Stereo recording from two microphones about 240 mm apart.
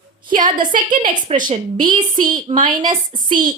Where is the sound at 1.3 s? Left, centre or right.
Right.